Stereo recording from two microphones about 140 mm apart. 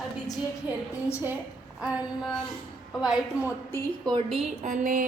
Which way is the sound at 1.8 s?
5° right (ahead or behind).